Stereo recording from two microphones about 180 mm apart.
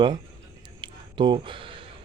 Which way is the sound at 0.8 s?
25° right (ahead or behind).